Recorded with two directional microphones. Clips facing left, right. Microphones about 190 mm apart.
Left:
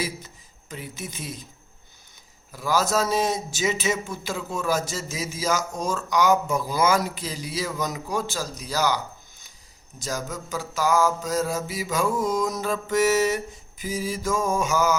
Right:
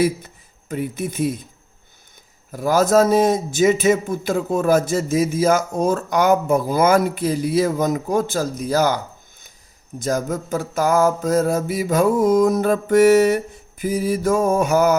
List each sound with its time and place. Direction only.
0.7 s mantra: 55° right (ahead or behind)
2.5 s speech: 50° right (ahead or behind)
10.0 s mantra: 55° right (ahead or behind)